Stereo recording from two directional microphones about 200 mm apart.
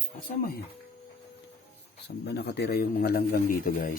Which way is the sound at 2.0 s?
55° left (ahead or behind).